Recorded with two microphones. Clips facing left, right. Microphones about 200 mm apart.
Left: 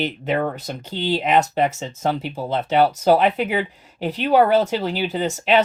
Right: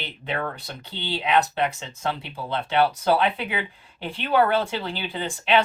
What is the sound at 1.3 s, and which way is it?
Speech, 45° left (ahead or behind).